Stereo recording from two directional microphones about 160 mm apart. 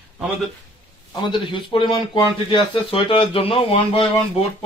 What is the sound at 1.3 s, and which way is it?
Speech, 30° left (ahead or behind).